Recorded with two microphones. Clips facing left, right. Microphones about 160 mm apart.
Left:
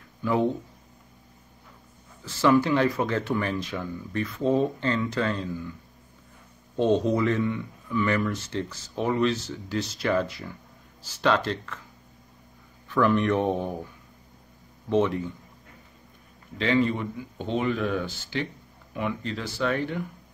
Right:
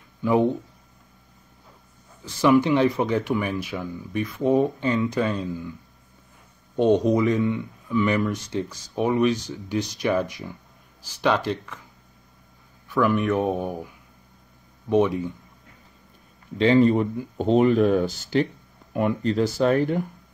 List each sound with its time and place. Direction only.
0.2 s speech: 15° right (ahead or behind)
2.2 s speech: 15° right (ahead or behind)
6.8 s speech: 15° right (ahead or behind)
12.9 s speech: 5° right (ahead or behind)
16.5 s speech: 35° right (ahead or behind)